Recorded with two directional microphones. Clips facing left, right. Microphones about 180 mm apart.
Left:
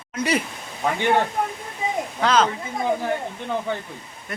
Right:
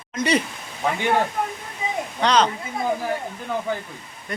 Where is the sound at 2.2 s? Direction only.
5° left (ahead or behind).